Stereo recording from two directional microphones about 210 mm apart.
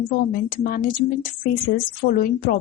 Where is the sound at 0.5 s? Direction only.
45° left (ahead or behind).